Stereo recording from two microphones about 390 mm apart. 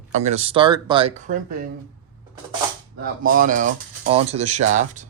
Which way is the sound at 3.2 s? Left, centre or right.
Right.